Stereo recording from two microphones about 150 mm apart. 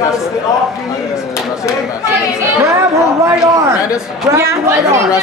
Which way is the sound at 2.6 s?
20° right (ahead or behind).